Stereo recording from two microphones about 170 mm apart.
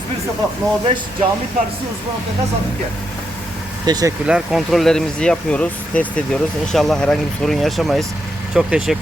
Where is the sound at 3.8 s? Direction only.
25° right (ahead or behind).